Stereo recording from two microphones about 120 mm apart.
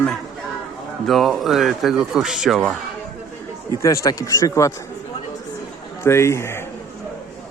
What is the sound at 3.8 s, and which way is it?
Speech, 25° left (ahead or behind).